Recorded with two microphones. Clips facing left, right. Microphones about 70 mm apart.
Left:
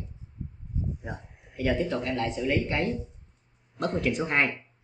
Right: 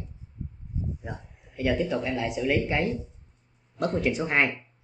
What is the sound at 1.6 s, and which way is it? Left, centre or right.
Speech, centre.